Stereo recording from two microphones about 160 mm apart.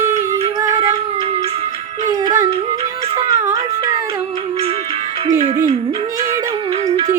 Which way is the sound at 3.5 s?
25° right (ahead or behind).